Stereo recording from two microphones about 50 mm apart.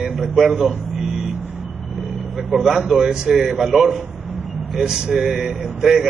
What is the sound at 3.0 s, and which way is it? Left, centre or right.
Speech, centre.